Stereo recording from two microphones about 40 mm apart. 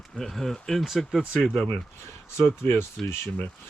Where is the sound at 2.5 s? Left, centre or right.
Left.